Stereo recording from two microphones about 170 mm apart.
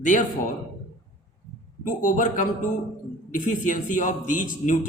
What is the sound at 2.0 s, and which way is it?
A man's voice, 50° left (ahead or behind).